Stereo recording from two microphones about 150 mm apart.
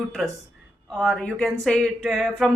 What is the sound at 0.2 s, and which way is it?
Speech, centre (ahead or behind).